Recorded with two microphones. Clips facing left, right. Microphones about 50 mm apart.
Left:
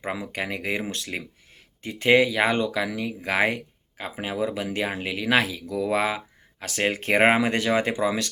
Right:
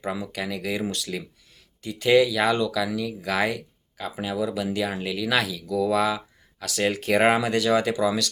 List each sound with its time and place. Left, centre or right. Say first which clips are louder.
0.0 s speech: even; left